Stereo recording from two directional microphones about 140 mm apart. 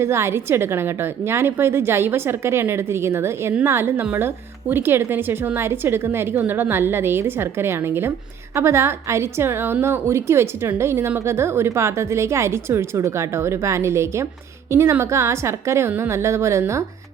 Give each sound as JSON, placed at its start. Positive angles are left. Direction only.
{"t": 0.0, "sound": "a woman's voice", "side_deg": -20}